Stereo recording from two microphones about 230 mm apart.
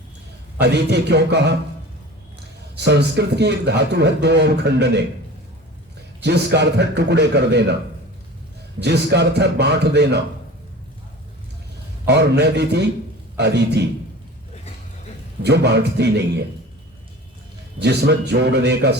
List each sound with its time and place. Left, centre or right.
0.6 s a man's voice: right
2.7 s a man's voice: right
6.2 s a man's voice: right
8.8 s a man's voice: right
12.0 s a man's voice: right
15.4 s a man's voice: right
17.7 s a man's voice: right